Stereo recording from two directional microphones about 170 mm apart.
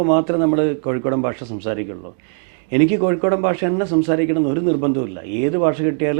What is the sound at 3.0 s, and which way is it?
A man's voice, 15° right (ahead or behind).